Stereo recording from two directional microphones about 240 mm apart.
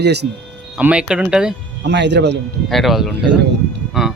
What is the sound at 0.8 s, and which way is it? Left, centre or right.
Speech, centre.